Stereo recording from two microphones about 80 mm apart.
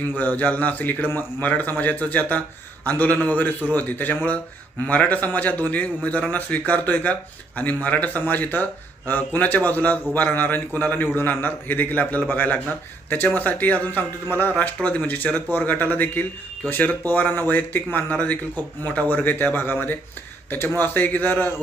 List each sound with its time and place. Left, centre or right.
0.2 s a man's voice: left
14.5 s a man's voice: centre